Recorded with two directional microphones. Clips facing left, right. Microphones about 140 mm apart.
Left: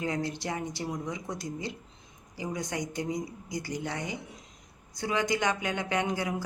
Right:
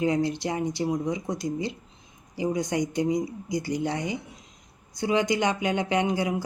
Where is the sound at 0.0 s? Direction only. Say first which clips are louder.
Right 7 dB; 20° right (ahead or behind).